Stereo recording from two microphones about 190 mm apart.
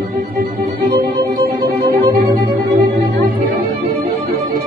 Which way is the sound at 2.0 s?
60° right (ahead or behind).